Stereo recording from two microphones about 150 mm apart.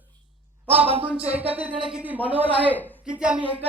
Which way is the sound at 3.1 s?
5° right (ahead or behind).